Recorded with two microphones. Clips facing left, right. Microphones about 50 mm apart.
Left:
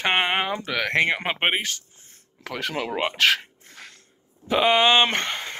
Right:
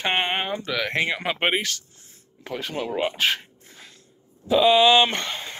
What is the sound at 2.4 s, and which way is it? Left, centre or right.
Speech, left.